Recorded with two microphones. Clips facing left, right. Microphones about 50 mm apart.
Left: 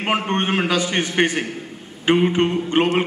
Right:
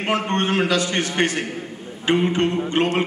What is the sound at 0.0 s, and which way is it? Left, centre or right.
A man's voice, left.